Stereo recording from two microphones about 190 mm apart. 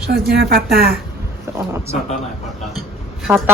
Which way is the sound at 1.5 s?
15° right (ahead or behind).